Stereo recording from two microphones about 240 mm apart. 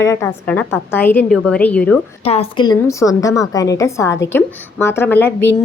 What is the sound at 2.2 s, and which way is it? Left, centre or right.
A woman's voice, left.